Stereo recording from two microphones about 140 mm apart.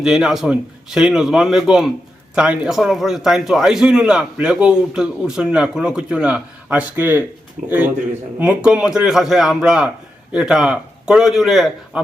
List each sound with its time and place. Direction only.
0.0 s a man's voice: 5° right (ahead or behind)
7.6 s speech: 70° right (ahead or behind)
8.4 s a man's voice: 10° right (ahead or behind)